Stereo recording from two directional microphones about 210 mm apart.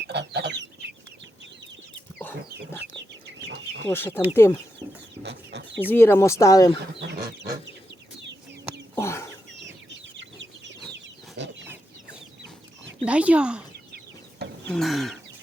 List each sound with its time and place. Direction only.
0.0 s chicken: 55° right (ahead or behind)
3.8 s speech: 10° left (ahead or behind)
5.2 s chicken: 55° right (ahead or behind)
5.9 s speech: 10° left (ahead or behind)
7.1 s chicken: 45° right (ahead or behind)
8.2 s bird: 55° right (ahead or behind)
9.0 s chicken: 15° left (ahead or behind)
9.5 s chicken: 60° right (ahead or behind)
13.1 s speech: 5° right (ahead or behind)
14.7 s a sound: centre (ahead or behind)